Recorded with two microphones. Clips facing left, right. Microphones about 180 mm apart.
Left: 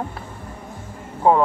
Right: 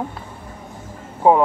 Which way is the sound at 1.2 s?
15° right (ahead or behind).